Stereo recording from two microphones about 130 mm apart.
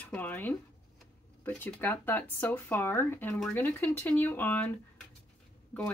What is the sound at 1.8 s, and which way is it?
Speech, 15° left (ahead or behind).